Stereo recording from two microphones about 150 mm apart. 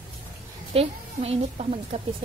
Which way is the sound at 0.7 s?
45° right (ahead or behind).